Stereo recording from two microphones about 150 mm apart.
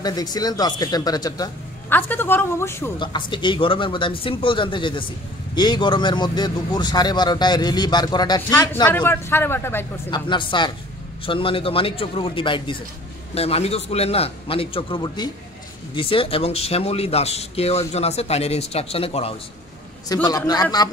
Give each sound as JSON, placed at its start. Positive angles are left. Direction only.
{"t": 0.0, "sound": "speech", "side_deg": 25}
{"t": 1.9, "sound": "speech", "side_deg": 15}
{"t": 3.0, "sound": "speech", "side_deg": 30}
{"t": 8.8, "sound": "speech", "side_deg": 15}
{"t": 10.1, "sound": "speech", "side_deg": 35}
{"t": 20.2, "sound": "speech", "side_deg": 25}